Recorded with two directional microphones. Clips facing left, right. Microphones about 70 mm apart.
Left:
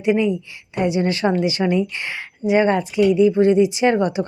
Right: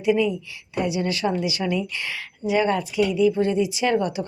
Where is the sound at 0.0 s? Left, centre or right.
Left.